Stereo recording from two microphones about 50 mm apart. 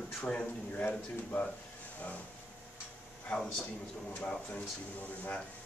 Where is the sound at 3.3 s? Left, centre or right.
Centre.